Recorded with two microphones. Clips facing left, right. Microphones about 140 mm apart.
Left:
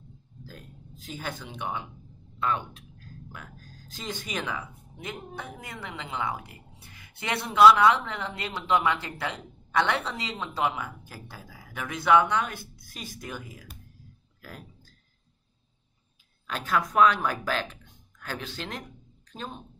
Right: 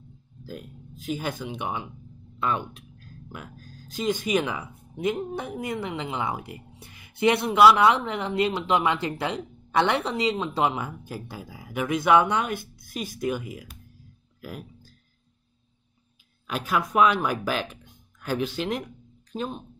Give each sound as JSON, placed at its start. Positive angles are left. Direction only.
{"t": 0.5, "sound": "speech", "side_deg": -15}
{"t": 3.9, "sound": "speech", "side_deg": -15}
{"t": 16.4, "sound": "speech", "side_deg": -10}